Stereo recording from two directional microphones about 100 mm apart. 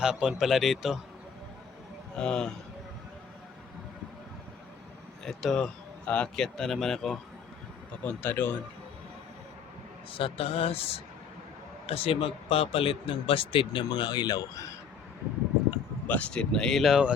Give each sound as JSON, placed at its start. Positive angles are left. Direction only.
{"t": 0.0, "sound": "speech", "side_deg": -5}
{"t": 2.1, "sound": "speech", "side_deg": 10}
{"t": 5.2, "sound": "speech", "side_deg": 5}
{"t": 8.0, "sound": "speech", "side_deg": 15}
{"t": 10.1, "sound": "a man's voice", "side_deg": 65}
{"t": 16.0, "sound": "speech", "side_deg": 15}